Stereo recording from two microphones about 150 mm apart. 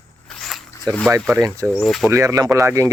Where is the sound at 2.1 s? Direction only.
20° right (ahead or behind).